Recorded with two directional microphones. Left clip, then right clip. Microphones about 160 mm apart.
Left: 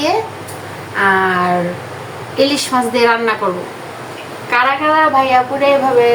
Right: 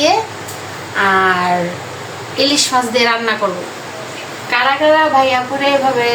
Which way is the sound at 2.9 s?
15° left (ahead or behind).